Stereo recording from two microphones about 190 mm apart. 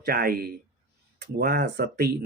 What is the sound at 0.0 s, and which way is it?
Speech, 50° right (ahead or behind).